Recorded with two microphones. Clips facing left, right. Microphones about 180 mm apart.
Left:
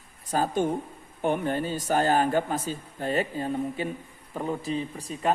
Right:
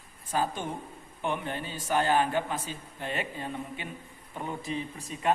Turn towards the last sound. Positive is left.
turn(degrees=35)  # may be behind; listen again after turning